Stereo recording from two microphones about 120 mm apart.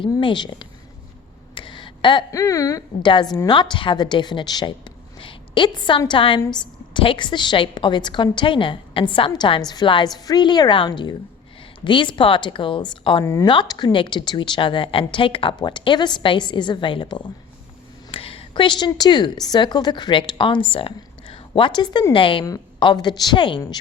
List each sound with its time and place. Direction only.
0.0 s a woman's voice: 45° left (ahead or behind)
1.5 s a sound: 40° left (ahead or behind)
2.3 s a woman's voice: 25° left (ahead or behind)
5.2 s a sound: 45° left (ahead or behind)
6.1 s a woman's voice: 45° left (ahead or behind)
13.2 s a woman's voice: 25° left (ahead or behind)
13.5 s a woman's voice: 40° left (ahead or behind)
18.1 s a sound: 50° left (ahead or behind)
18.9 s a woman's voice: 35° left (ahead or behind)